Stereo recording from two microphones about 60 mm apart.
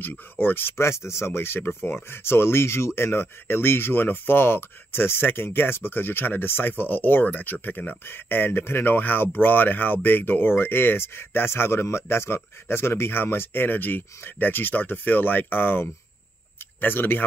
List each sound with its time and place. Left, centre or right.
0.0 s speech: left